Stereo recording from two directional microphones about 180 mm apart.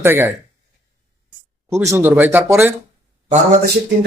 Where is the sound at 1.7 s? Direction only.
15° right (ahead or behind).